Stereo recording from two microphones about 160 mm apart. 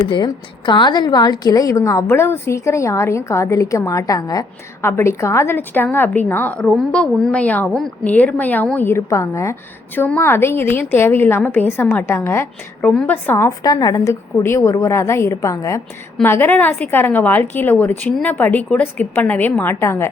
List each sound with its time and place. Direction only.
0.1 s a woman's voice: 30° left (ahead or behind)